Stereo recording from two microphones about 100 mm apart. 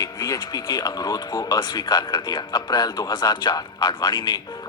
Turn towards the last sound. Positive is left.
turn(degrees=45)  # may be behind; listen again after turning